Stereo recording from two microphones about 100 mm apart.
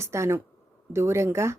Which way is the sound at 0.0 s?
25° right (ahead or behind).